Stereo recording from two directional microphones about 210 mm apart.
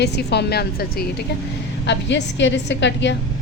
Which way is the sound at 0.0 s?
50° left (ahead or behind).